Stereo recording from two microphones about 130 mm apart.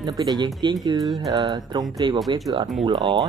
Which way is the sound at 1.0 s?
Centre (ahead or behind).